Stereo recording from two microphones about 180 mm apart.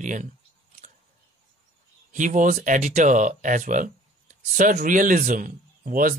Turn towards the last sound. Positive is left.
turn(degrees=-50)  # may be behind; listen again after turning